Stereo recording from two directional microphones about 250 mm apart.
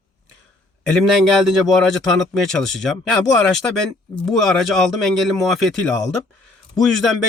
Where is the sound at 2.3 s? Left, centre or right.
Centre.